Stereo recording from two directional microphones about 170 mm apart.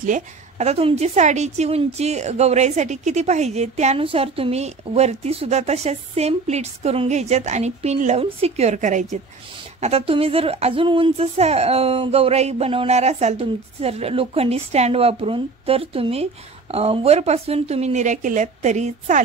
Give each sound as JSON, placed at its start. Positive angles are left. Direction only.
{"t": 0.0, "sound": "a woman's voice", "side_deg": -45}